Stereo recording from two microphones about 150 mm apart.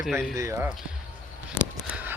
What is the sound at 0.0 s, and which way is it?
Speech, centre (ahead or behind).